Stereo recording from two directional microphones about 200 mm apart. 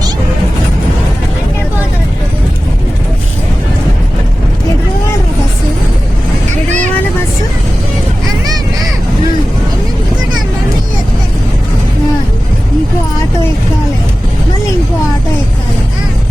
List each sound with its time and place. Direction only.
6.7 s vehicle: 35° right (ahead or behind)